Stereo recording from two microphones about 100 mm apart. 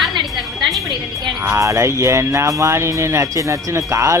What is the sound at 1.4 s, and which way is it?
Speech, 30° right (ahead or behind).